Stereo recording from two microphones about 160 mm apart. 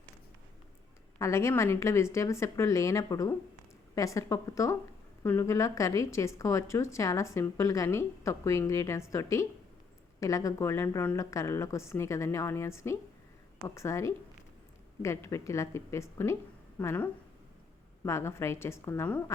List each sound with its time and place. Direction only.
1.2 s a woman's voice: 15° left (ahead or behind)